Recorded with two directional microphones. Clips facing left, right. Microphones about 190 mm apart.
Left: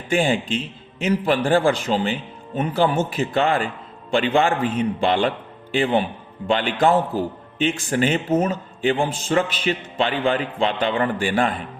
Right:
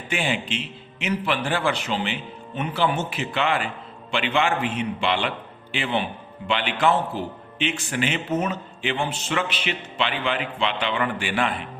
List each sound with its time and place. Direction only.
0.1 s a man's voice: 45° left (ahead or behind)